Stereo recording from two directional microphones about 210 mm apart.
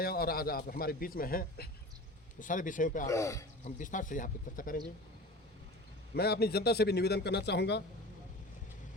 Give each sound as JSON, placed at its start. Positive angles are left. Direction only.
{"t": 0.0, "sound": "a man's voice", "side_deg": 45}
{"t": 3.1, "sound": "speech", "side_deg": 15}
{"t": 3.6, "sound": "speech", "side_deg": 40}
{"t": 6.1, "sound": "a man's voice", "side_deg": 50}